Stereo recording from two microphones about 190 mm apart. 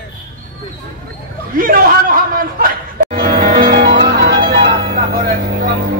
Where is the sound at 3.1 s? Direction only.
50° right (ahead or behind).